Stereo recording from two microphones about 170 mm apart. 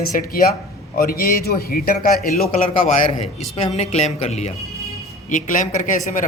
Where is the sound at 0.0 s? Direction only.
60° left (ahead or behind).